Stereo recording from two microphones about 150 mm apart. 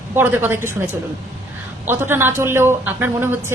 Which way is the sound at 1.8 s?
15° right (ahead or behind).